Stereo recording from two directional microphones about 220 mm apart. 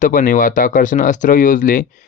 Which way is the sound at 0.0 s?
40° left (ahead or behind).